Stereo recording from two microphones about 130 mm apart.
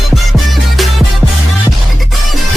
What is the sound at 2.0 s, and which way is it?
Music, centre (ahead or behind).